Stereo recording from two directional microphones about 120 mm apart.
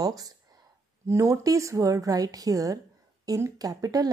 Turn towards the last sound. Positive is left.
turn(degrees=-30)  # may be behind; listen again after turning